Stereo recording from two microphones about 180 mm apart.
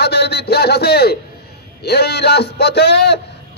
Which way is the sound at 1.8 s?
65° left (ahead or behind).